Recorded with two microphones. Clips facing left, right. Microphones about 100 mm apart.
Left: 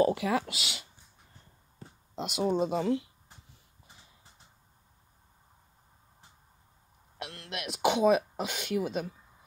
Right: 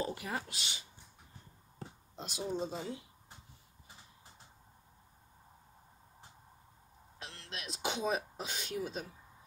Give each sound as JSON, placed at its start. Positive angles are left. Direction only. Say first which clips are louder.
{"t": 0.0, "sound": "speech", "louder": "left 12 dB", "side_deg": 90}
{"t": 2.1, "sound": "speech", "louder": "left 9 dB", "side_deg": 75}
{"t": 7.2, "sound": "speech", "louder": "left 8 dB", "side_deg": 65}